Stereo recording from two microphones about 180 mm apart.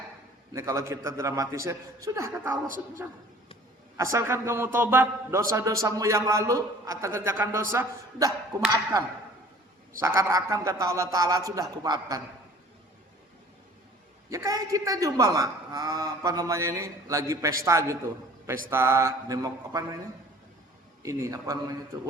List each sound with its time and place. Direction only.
0.5 s a man's voice: 15° right (ahead or behind)
14.3 s a man's voice: 20° right (ahead or behind)
21.0 s a man's voice: 20° right (ahead or behind)